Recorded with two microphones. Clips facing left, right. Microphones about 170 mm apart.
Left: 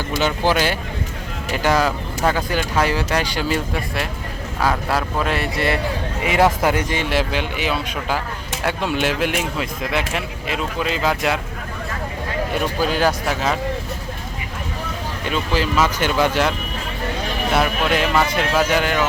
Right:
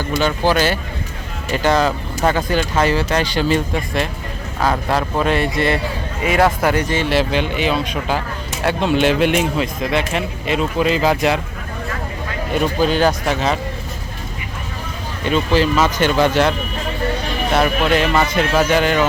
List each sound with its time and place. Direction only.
0.2 s speech: 15° left (ahead or behind)
6.2 s speech: 20° left (ahead or behind); by 11.3 s centre (ahead or behind)
12.8 s speech: 5° left (ahead or behind)
15.2 s speech: 5° left (ahead or behind)